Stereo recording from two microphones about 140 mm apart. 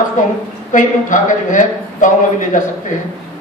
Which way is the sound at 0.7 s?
65° left (ahead or behind).